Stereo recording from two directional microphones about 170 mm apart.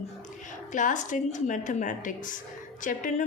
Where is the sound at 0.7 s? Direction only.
50° left (ahead or behind).